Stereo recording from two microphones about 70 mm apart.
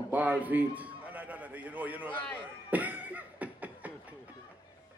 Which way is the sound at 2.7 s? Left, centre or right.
Right.